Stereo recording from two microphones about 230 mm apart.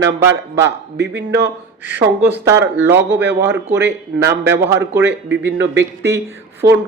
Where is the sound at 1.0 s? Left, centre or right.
Right.